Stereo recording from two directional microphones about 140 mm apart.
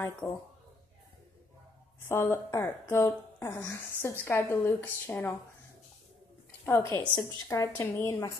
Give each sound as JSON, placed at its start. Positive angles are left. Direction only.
{"t": 0.2, "sound": "a woman's voice", "side_deg": 20}
{"t": 2.0, "sound": "a woman's voice", "side_deg": 20}
{"t": 6.6, "sound": "a woman's voice", "side_deg": 20}